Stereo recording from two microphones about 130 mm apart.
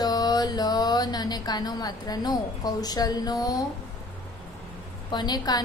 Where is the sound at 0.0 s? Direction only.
30° left (ahead or behind).